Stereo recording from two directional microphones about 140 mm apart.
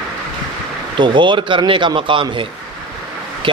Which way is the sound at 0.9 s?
35° right (ahead or behind).